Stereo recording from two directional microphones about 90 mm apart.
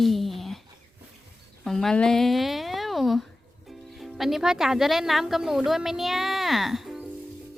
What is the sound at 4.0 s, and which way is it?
Speech, centre (ahead or behind).